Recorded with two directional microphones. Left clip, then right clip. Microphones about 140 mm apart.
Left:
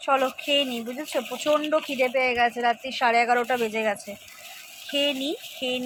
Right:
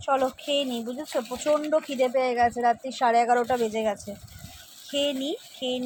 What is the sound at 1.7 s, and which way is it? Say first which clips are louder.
Speech: even; 15° right (ahead or behind).